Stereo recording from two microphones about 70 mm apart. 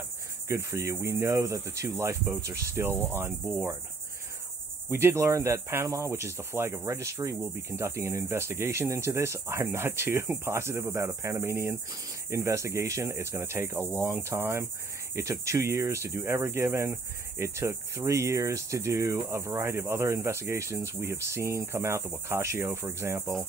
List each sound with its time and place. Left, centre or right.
0.5 s cricket: right
3.1 s cricket: right
4.8 s cricket: right
15.1 s cricket: right